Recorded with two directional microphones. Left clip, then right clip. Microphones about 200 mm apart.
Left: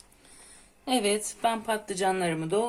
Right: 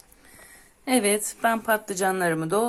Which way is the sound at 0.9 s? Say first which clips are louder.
Right 3 dB; 20° right (ahead or behind).